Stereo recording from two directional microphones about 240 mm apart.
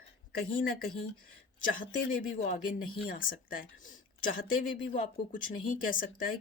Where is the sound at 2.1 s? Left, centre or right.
Left.